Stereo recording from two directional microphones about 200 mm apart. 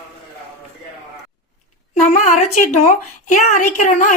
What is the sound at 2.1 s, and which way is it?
A woman's voice, 35° left (ahead or behind).